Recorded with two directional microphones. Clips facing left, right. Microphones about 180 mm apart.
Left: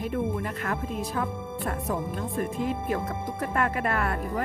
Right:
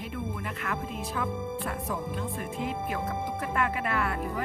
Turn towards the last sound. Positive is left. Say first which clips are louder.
# left 2 dB
turn(degrees=45)  # may be behind; listen again after turning